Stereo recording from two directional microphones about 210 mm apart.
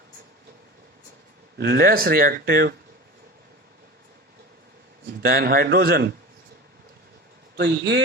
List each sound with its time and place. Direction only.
1.5 s speech: 50° right (ahead or behind)
5.2 s speech: 45° right (ahead or behind)
7.5 s a man's voice: 50° right (ahead or behind)